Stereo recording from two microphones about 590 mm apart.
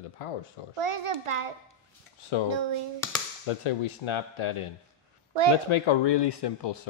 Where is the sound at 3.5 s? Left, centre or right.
Left.